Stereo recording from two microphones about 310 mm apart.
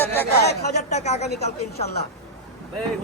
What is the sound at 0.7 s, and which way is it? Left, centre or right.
Speech, left.